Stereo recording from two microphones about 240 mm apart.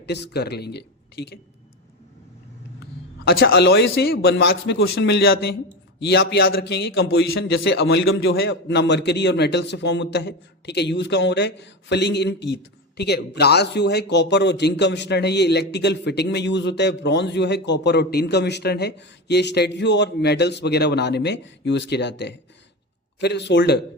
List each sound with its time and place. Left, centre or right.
0.0 s speech: left
3.2 s speech: left